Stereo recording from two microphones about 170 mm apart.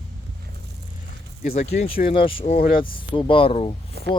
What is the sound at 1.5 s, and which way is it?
Speech, 40° left (ahead or behind).